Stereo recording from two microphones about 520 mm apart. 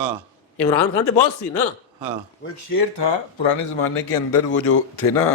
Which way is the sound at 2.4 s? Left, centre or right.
Left.